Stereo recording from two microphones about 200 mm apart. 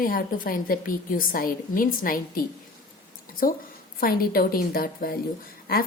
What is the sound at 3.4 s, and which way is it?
A woman's voice, 45° left (ahead or behind).